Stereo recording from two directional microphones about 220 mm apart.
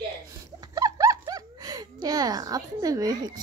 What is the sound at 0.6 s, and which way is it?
Bird, 15° right (ahead or behind).